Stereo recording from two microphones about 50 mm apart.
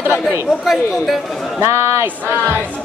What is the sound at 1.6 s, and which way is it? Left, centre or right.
Speech, right.